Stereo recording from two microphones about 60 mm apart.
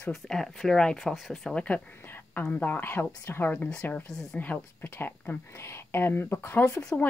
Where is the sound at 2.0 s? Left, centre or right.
Left.